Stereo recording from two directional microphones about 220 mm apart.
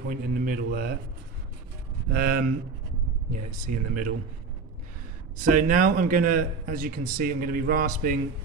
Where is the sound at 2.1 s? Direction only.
45° right (ahead or behind).